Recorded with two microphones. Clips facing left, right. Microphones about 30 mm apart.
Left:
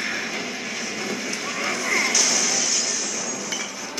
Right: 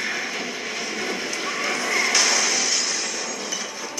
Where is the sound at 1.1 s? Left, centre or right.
Right.